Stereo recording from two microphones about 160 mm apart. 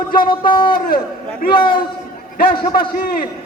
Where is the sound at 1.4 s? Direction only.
65° left (ahead or behind).